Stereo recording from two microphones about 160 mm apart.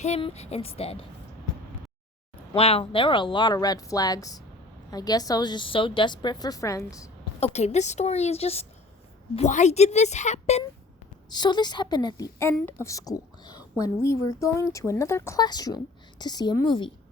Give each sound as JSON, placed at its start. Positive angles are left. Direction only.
{"t": 0.0, "sound": "speech", "side_deg": 40}
{"t": 2.6, "sound": "a woman's voice", "side_deg": 40}
{"t": 7.3, "sound": "a woman's voice", "side_deg": 40}
{"t": 11.3, "sound": "a woman's voice", "side_deg": 25}